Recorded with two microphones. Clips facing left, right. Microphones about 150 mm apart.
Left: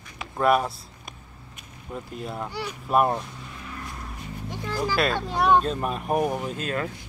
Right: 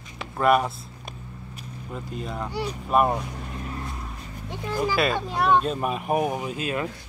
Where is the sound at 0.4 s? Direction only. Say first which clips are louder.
Right 1 dB; centre (ahead or behind).